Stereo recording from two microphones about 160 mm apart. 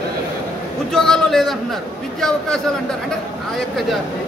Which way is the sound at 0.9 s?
5° left (ahead or behind).